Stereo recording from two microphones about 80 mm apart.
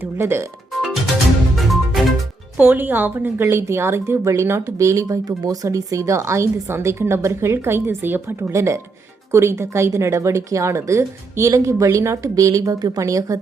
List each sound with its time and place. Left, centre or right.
0.0 s speech: right
1.5 s music: centre
2.6 s a woman's voice: right